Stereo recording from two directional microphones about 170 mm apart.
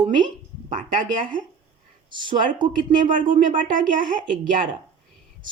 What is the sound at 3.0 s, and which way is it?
Speech, 50° right (ahead or behind).